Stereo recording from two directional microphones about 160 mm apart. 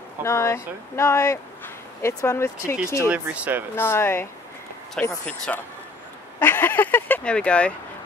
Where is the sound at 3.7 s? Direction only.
15° left (ahead or behind).